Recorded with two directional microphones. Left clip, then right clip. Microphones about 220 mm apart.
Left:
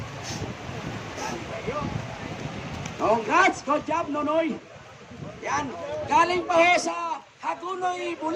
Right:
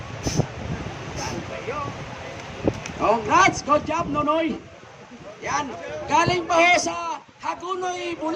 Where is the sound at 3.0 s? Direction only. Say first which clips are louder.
Right 3 dB; 40° right (ahead or behind).